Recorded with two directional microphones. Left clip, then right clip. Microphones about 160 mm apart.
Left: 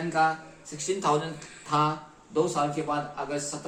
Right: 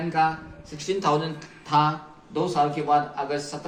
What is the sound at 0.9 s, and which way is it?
Speech, 40° left (ahead or behind).